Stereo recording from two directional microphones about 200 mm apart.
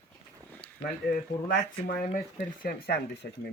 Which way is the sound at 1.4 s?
50° left (ahead or behind).